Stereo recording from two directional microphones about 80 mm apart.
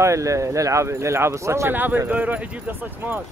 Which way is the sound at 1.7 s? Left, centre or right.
Right.